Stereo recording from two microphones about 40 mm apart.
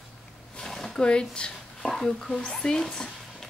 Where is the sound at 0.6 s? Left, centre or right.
Centre.